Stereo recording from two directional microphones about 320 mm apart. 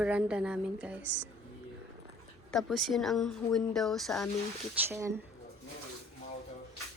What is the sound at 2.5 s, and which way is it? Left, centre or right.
A woman's voice, centre.